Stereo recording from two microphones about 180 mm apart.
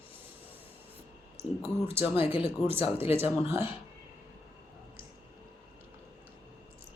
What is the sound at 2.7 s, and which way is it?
Speech, 10° right (ahead or behind).